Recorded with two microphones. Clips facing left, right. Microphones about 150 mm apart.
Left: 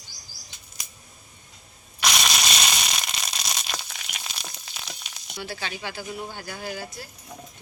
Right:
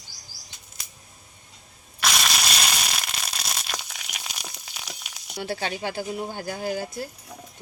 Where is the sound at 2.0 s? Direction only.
Centre (ahead or behind).